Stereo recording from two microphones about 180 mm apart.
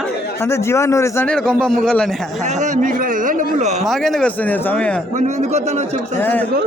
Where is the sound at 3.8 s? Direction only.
Centre (ahead or behind).